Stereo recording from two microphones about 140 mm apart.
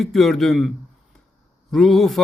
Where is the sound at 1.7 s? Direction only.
Centre (ahead or behind).